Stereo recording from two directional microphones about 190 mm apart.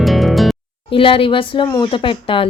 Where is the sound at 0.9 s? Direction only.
30° left (ahead or behind).